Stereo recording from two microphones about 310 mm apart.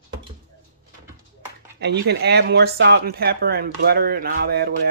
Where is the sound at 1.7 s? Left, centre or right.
Right.